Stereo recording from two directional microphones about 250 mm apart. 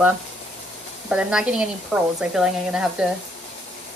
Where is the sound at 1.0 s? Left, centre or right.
Centre.